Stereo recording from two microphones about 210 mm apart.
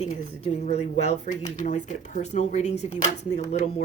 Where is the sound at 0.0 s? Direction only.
30° left (ahead or behind).